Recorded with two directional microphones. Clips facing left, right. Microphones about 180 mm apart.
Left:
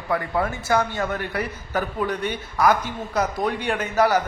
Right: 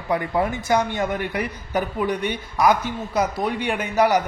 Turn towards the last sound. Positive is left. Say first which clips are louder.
# right 1 dB
turn(degrees=-15)  # may be behind; listen again after turning